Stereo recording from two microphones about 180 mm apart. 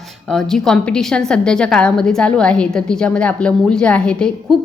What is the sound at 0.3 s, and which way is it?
A woman's voice, 5° left (ahead or behind).